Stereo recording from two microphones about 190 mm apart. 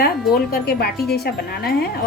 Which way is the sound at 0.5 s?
55° left (ahead or behind).